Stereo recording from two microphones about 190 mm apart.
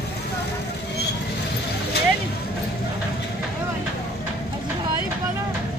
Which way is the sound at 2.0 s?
60° left (ahead or behind).